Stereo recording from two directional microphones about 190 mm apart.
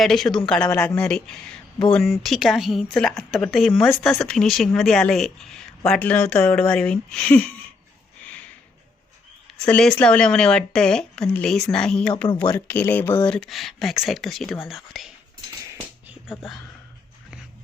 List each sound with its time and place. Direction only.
0.0 s speech: centre (ahead or behind)
9.6 s speech: 5° left (ahead or behind)
15.6 s coin: 10° right (ahead or behind)
16.4 s speech: centre (ahead or behind)